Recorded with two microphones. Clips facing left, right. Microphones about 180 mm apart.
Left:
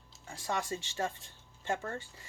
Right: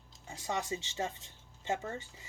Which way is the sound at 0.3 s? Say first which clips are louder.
Left 1 dB; 20° right (ahead or behind).